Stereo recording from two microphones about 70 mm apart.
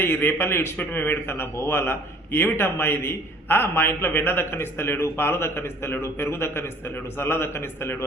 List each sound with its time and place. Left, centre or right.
0.0 s a man's voice: left